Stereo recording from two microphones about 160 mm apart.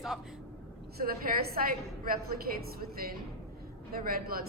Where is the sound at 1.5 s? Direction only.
65° right (ahead or behind).